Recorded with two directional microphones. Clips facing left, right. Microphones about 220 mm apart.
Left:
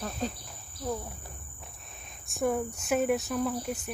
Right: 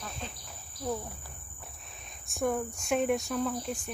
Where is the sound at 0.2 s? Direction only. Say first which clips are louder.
Left 12 dB; 40° left (ahead or behind).